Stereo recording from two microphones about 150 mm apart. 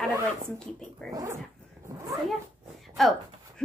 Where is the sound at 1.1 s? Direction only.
20° right (ahead or behind).